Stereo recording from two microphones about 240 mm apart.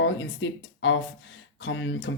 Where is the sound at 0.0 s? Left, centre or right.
Left.